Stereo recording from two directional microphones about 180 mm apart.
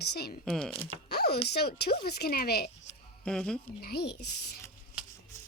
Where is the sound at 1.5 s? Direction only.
65° left (ahead or behind).